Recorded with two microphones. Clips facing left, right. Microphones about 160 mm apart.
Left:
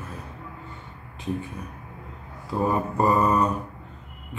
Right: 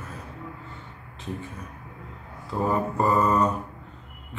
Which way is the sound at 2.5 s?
15° left (ahead or behind).